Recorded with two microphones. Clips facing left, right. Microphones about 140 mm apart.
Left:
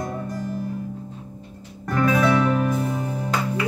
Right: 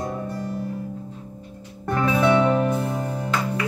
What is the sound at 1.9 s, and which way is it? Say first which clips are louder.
Music: even; 25° right (ahead or behind).